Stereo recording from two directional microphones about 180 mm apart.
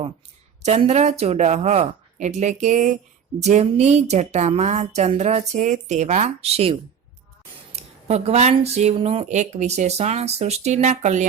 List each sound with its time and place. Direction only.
0.6 s speech: 35° right (ahead or behind)